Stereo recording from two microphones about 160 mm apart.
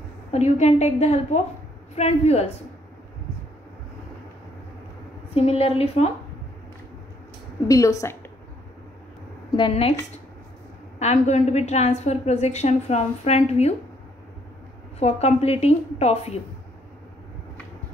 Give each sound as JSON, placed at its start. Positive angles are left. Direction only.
{"t": 0.3, "sound": "a woman's voice", "side_deg": 45}
{"t": 5.3, "sound": "a woman's voice", "side_deg": 40}
{"t": 7.6, "sound": "a woman's voice", "side_deg": 20}
{"t": 9.6, "sound": "a woman's voice", "side_deg": 35}
{"t": 11.0, "sound": "a woman's voice", "side_deg": 45}
{"t": 15.0, "sound": "a woman's voice", "side_deg": 40}